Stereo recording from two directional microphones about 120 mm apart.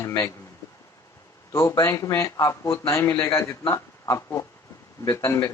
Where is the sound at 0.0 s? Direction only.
20° left (ahead or behind).